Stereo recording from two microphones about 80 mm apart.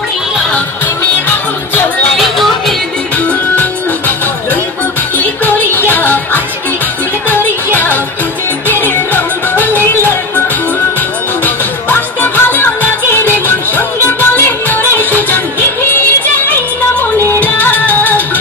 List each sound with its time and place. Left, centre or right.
2.1 s music: centre
5.2 s music: left
11.4 s music: left
17.2 s music: left